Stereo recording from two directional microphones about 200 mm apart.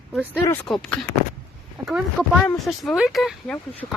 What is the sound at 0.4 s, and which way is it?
Speech, 5° left (ahead or behind).